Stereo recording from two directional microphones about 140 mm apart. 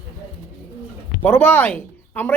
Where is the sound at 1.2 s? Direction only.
10° left (ahead or behind).